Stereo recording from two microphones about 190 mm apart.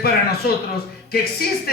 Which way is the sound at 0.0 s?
55° left (ahead or behind).